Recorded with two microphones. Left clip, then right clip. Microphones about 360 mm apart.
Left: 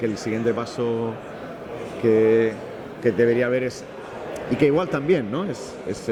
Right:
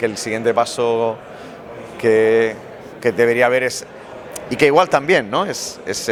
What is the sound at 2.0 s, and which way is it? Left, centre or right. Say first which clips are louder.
A man's voice: right 4 dB; right.